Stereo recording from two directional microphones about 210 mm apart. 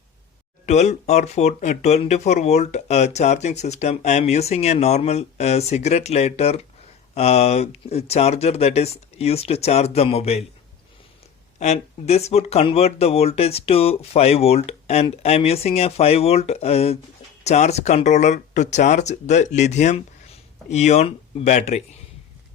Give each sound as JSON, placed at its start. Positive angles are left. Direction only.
{"t": 0.6, "sound": "speech", "side_deg": 30}
{"t": 11.6, "sound": "speech", "side_deg": 30}